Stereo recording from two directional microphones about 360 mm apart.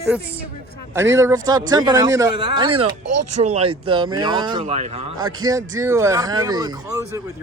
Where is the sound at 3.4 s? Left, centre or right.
Centre.